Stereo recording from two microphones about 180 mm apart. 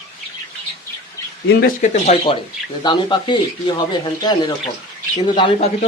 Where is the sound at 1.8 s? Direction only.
45° left (ahead or behind).